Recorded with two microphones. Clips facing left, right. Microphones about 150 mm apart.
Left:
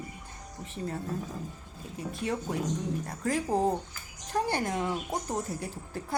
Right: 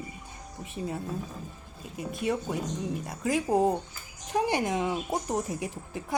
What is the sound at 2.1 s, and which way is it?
Speech, 10° right (ahead or behind).